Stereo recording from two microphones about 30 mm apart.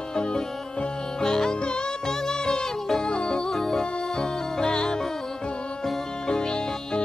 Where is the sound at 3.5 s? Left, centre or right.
Centre.